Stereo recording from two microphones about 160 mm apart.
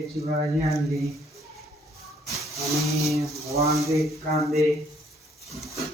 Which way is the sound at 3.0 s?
20° right (ahead or behind).